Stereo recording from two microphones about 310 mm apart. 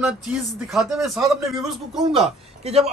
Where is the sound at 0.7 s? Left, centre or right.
Centre.